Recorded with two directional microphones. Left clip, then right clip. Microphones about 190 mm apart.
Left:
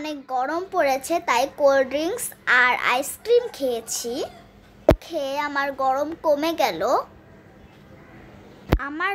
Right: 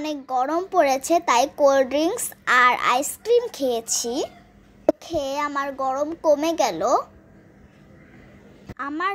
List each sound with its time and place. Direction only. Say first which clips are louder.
0.0 s a child's voice: right 2 dB; 20° right (ahead or behind)
8.7 s speech: even; 20° right (ahead or behind)